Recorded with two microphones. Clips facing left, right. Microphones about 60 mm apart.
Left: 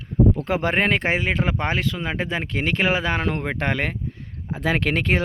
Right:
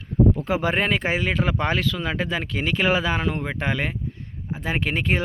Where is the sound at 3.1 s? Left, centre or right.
Left.